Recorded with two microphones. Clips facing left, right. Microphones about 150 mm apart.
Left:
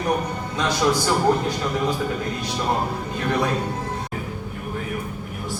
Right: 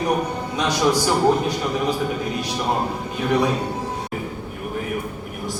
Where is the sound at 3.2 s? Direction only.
15° right (ahead or behind).